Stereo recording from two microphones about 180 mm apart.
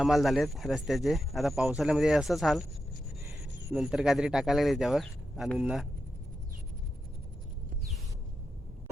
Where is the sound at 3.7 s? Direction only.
5° right (ahead or behind).